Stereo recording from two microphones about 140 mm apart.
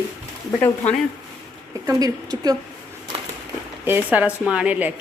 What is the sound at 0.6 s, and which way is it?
Speech, 10° left (ahead or behind).